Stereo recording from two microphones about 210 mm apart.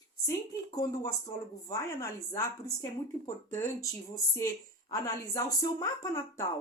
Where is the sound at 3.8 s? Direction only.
15° left (ahead or behind).